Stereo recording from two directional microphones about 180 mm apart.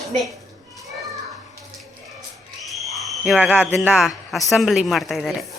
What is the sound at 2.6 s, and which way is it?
A woman's voice, centre (ahead or behind).